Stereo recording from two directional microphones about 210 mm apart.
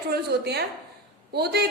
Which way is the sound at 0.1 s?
50° right (ahead or behind).